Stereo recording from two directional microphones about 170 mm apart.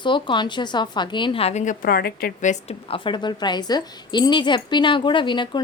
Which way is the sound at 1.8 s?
65° left (ahead or behind).